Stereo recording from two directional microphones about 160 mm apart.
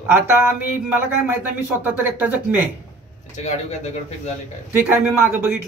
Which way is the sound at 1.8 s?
10° right (ahead or behind).